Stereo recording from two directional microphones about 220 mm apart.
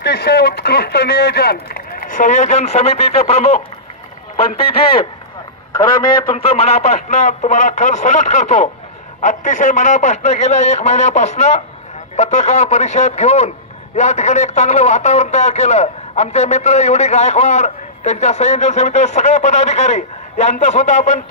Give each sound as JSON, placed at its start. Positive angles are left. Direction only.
{"t": 0.0, "sound": "speech", "side_deg": 45}
{"t": 6.3, "sound": "a man's voice", "side_deg": 30}